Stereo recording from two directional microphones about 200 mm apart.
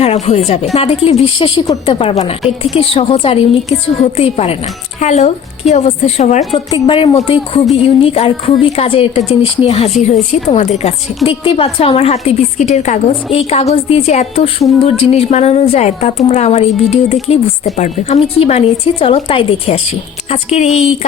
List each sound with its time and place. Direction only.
0.0 s a woman's voice: 30° left (ahead or behind)